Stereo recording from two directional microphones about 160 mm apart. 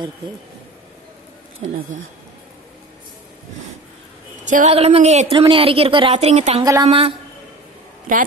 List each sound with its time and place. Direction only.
4.5 s a woman's voice: 50° right (ahead or behind)
4.7 s a woman's voice: 40° right (ahead or behind)
6.6 s speech: 20° right (ahead or behind)
6.9 s a woman's voice: 35° right (ahead or behind)